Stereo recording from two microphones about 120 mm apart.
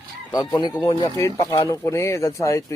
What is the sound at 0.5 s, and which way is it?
Speech, 35° left (ahead or behind).